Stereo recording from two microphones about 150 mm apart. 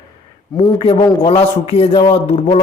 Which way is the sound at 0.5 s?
25° left (ahead or behind).